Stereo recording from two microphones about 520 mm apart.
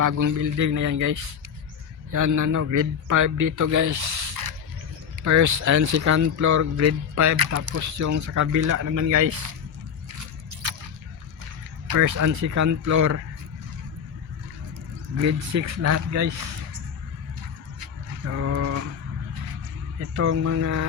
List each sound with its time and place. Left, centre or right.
0.0 s speech: right
4.1 s mechanisms: right
5.2 s speech: right
11.9 s speech: right
15.2 s speech: right
18.3 s speech: right
20.1 s speech: right